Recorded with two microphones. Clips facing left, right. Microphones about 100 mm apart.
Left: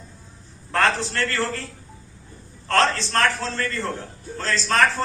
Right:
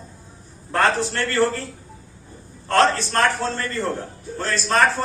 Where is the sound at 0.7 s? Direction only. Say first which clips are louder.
Right 2 dB; 20° right (ahead or behind).